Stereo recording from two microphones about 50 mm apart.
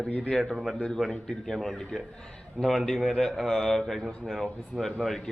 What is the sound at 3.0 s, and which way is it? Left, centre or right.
Speech, centre.